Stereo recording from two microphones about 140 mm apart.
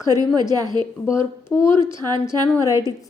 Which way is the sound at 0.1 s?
25° right (ahead or behind).